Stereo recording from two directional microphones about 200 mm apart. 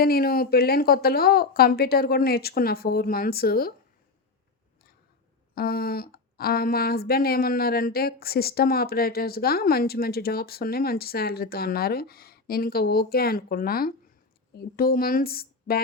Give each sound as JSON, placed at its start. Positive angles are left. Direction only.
{"t": 0.0, "sound": "speech", "side_deg": 50}
{"t": 5.5, "sound": "speech", "side_deg": 50}